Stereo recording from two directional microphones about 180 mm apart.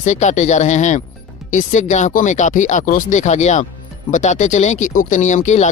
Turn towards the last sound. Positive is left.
turn(degrees=40)  # may be behind; listen again after turning